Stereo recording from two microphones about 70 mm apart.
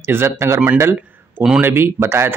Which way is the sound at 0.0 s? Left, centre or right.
Right.